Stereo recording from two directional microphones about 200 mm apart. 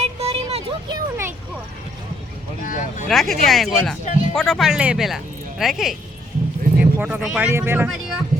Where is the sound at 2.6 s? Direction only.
40° left (ahead or behind).